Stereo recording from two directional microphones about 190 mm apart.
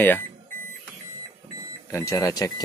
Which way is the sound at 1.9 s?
15° left (ahead or behind).